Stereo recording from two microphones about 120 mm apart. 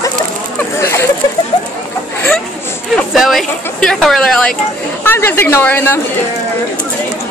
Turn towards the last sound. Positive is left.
turn(degrees=15)  # may be behind; listen again after turning